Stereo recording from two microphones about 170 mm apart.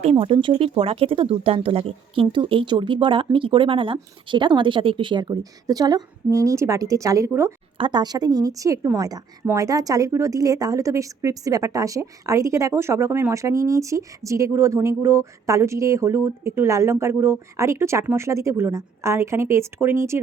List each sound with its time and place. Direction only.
0.0 s speech: 35° right (ahead or behind); by 7.5 s 15° right (ahead or behind)
7.8 s speech: 25° right (ahead or behind)